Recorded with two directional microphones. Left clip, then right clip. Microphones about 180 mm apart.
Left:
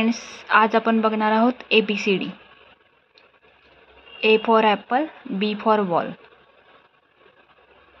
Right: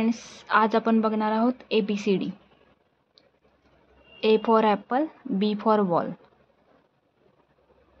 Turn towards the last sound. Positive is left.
turn(degrees=-15)  # may be behind; listen again after turning